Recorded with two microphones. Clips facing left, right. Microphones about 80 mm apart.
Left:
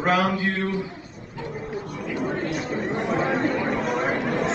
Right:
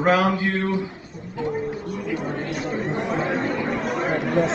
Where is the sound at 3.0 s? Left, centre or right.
Left.